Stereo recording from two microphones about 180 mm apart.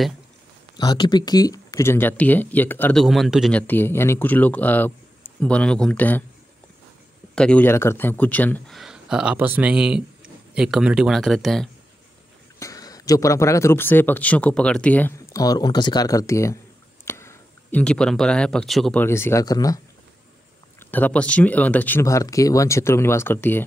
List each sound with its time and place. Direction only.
0.7 s speech: 25° left (ahead or behind); by 6.2 s 10° left (ahead or behind)
7.3 s speech: 5° left (ahead or behind)
8.7 s speech: 5° right (ahead or behind)
12.5 s speech: 20° left (ahead or behind); by 19.0 s centre (ahead or behind)
19.0 s speech: 15° left (ahead or behind)
20.9 s speech: 10° left (ahead or behind)